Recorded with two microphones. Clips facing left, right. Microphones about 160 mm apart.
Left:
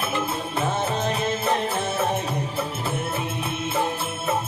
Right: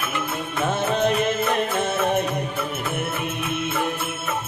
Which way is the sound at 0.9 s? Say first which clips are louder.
Right 4 dB; 65° right (ahead or behind).